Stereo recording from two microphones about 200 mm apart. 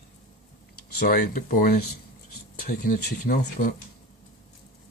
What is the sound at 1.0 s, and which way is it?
Speech, 45° left (ahead or behind).